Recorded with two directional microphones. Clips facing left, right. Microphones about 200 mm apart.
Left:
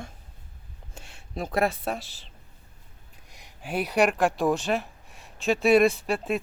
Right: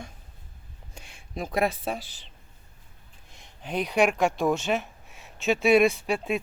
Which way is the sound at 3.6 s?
5° left (ahead or behind).